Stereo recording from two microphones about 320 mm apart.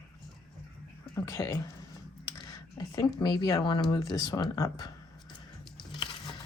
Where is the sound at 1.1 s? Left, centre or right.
Centre.